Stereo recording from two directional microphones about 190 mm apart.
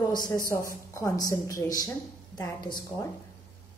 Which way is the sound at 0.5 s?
15° left (ahead or behind).